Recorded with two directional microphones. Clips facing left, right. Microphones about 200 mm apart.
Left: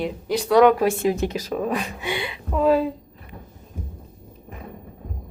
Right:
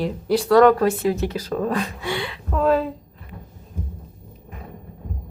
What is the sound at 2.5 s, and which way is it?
Speech, 5° left (ahead or behind).